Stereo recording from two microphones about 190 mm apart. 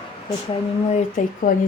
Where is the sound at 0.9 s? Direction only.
45° left (ahead or behind).